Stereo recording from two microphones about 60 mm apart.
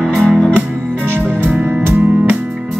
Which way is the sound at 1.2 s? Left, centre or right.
Right.